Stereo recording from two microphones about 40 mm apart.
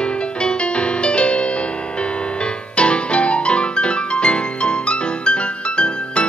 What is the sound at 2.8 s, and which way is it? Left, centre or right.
Music, left.